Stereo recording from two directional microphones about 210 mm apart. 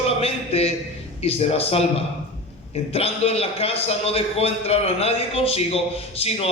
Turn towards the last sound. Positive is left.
turn(degrees=30)  # may be behind; listen again after turning